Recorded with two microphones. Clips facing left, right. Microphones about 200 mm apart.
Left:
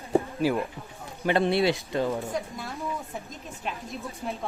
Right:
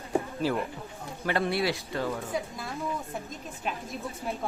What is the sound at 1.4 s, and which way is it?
Speech, 25° left (ahead or behind).